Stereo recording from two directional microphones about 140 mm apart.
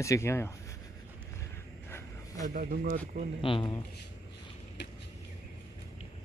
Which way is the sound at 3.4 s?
40° left (ahead or behind).